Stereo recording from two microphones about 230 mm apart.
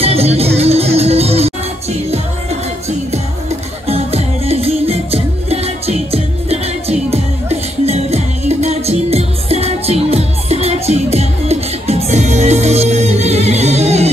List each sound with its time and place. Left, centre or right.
0.0 s music: right